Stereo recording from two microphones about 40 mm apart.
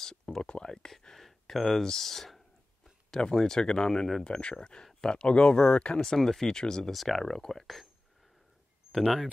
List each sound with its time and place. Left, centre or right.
0.0 s a sound: centre
0.4 s speech: left
1.1 s a sound: centre
3.2 s speech: centre
5.9 s speech: centre
6.9 s speech: centre
7.2 s speech: centre